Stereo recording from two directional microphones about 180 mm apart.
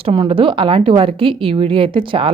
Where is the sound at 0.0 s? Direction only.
30° right (ahead or behind).